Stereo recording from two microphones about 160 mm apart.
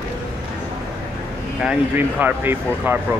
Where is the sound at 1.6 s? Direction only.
10° right (ahead or behind).